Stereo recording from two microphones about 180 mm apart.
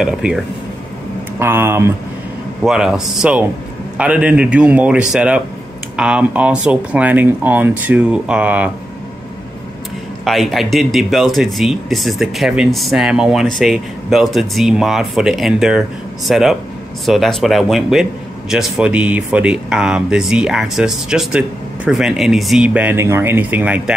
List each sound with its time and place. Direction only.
0.0 s speech: 5° right (ahead or behind)
1.4 s speech: 15° right (ahead or behind)
2.6 s speech: 5° right (ahead or behind)
10.2 s speech: centre (ahead or behind)